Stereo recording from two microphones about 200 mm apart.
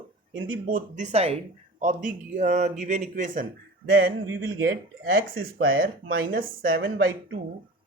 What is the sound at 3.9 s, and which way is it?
Speech, 50° right (ahead or behind).